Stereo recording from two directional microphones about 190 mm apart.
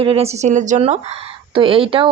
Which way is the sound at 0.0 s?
30° right (ahead or behind).